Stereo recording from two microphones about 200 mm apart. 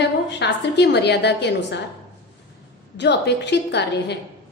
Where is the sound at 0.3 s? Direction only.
60° left (ahead or behind).